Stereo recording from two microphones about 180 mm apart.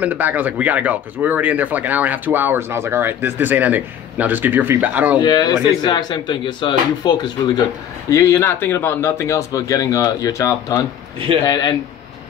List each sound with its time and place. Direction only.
0.0 s speech: 10° right (ahead or behind)
5.2 s a man's voice: 25° left (ahead or behind)